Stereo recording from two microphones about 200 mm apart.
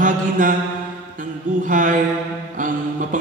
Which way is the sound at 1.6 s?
40° right (ahead or behind).